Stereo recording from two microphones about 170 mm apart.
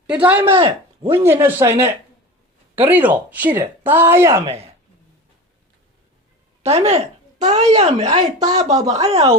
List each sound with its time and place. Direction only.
0.1 s speech: 10° right (ahead or behind)
0.5 s speech: 30° right (ahead or behind)
1.2 s speech: 15° right (ahead or behind)
2.7 s speech: 10° right (ahead or behind)
6.6 s speech: 35° right (ahead or behind)